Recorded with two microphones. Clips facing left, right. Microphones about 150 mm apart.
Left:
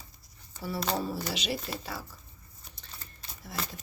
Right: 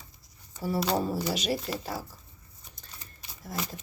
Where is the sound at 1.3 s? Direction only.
45° right (ahead or behind).